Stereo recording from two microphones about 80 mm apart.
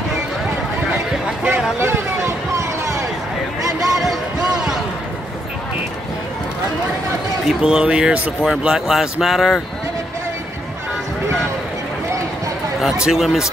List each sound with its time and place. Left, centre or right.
1.8 s a sound: right
3.9 s music: centre
7.4 s speech: centre
12.8 s speech: centre